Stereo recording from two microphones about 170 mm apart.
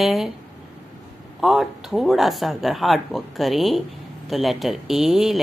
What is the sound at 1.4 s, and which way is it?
Speech, centre (ahead or behind).